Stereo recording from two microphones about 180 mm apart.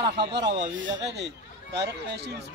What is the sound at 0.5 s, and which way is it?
Speech, 90° right.